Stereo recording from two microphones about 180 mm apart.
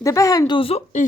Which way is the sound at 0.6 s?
35° left (ahead or behind).